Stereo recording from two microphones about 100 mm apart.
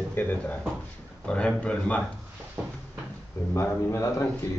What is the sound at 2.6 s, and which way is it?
Cupboard open or close, 10° right (ahead or behind).